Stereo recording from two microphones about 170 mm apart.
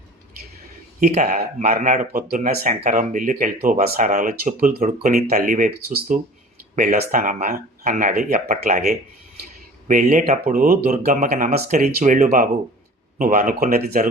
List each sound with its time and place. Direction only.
0.9 s speech: 50° right (ahead or behind)
2.2 s speech: 65° right (ahead or behind)